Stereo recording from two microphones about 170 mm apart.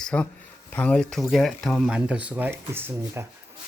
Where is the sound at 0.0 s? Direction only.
5° left (ahead or behind).